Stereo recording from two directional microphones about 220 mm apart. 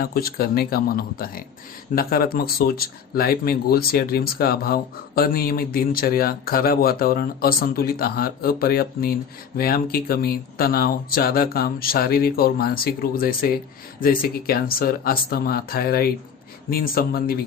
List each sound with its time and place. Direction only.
0.0 s speech: 45° left (ahead or behind)